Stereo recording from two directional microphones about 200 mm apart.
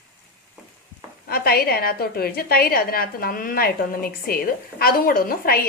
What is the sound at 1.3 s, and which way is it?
A woman's voice, 50° left (ahead or behind).